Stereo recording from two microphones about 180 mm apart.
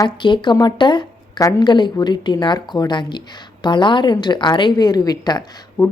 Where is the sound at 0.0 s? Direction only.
25° left (ahead or behind).